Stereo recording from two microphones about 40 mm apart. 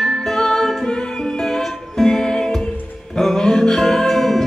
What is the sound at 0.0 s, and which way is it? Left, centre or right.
Music, centre.